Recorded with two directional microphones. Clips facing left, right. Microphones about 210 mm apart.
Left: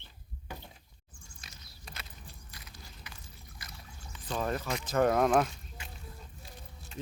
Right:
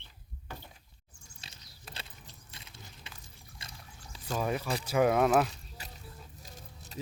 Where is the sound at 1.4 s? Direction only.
30° right (ahead or behind).